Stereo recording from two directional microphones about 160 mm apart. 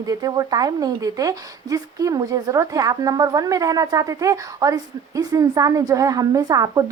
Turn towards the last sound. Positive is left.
turn(degrees=-20)  # may be behind; listen again after turning